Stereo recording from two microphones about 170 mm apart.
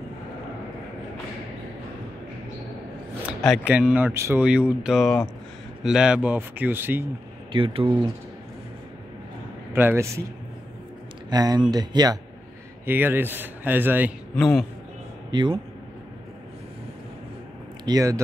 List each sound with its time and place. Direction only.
3.3 s speech: 5° right (ahead or behind)
7.5 s speech: 30° right (ahead or behind)
9.7 s a man's voice: 15° right (ahead or behind)
11.2 s speech: 25° right (ahead or behind)
12.8 s speech: 10° right (ahead or behind)
14.3 s a man's voice: 5° left (ahead or behind)
15.3 s speech: 30° right (ahead or behind)
17.8 s speech: 20° right (ahead or behind)